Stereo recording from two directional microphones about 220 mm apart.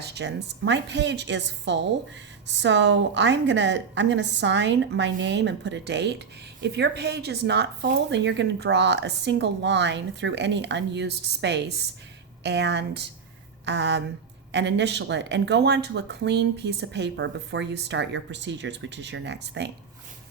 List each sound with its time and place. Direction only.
0.0 s a woman's voice: 50° right (ahead or behind)